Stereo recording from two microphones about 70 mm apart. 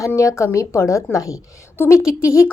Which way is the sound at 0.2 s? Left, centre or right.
Left.